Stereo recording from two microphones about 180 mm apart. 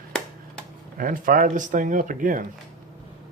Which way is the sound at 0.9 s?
50° right (ahead or behind).